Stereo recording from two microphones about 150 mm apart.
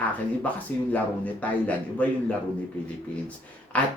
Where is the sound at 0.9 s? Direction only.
10° left (ahead or behind).